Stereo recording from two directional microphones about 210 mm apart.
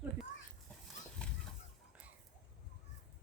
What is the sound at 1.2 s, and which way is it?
Chicken, 5° left (ahead or behind).